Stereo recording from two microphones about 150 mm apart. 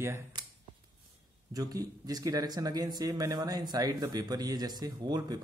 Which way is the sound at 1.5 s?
25° right (ahead or behind).